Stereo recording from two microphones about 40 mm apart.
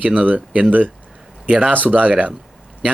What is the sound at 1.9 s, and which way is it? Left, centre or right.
Speech, right.